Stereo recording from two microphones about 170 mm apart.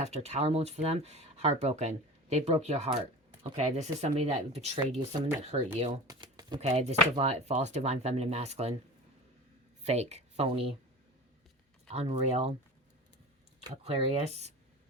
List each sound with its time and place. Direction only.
0.0 s speech: 40° right (ahead or behind)
6.1 s shuffling cards: 25° right (ahead or behind)
6.6 s speech: 40° right (ahead or behind)
9.8 s speech: 40° right (ahead or behind)
11.9 s speech: 40° right (ahead or behind)
13.8 s speech: 40° right (ahead or behind)